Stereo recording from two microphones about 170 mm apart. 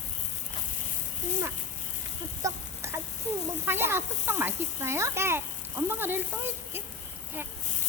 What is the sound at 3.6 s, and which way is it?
Speech, 15° right (ahead or behind).